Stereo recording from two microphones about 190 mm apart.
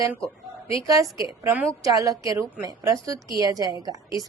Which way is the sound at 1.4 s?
10° right (ahead or behind).